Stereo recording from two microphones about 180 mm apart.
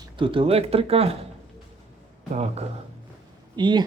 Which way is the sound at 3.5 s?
25° right (ahead or behind).